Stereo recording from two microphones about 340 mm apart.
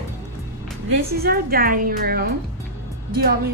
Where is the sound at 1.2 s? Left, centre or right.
Right.